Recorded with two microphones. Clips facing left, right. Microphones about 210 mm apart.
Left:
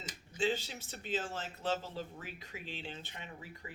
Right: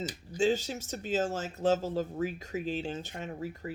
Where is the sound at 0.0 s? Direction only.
35° right (ahead or behind).